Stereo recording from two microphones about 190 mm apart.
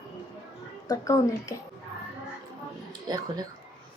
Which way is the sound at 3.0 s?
20° right (ahead or behind).